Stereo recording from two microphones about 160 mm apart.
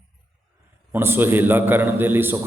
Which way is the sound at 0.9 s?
15° right (ahead or behind).